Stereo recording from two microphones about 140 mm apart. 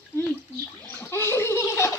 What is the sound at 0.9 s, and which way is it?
Gargling, 20° left (ahead or behind).